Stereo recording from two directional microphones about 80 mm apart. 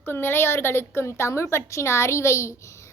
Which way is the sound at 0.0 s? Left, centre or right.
Left.